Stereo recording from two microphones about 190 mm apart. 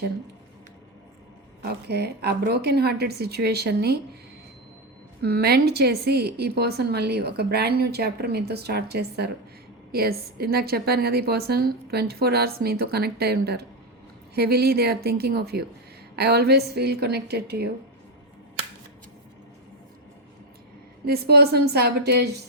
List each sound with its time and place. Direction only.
1.6 s a woman's voice: 60° right (ahead or behind)
5.2 s a woman's voice: 55° right (ahead or behind)
21.1 s a woman's voice: 55° right (ahead or behind)